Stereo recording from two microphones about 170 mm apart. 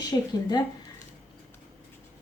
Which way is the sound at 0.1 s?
20° left (ahead or behind).